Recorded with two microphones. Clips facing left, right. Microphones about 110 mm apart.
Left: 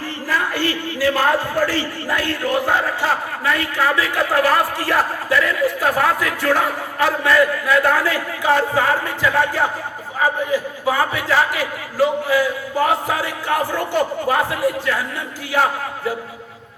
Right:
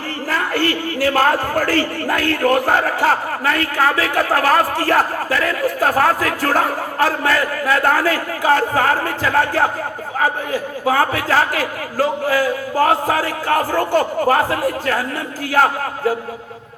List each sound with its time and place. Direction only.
0.3 s speech: 50° right (ahead or behind)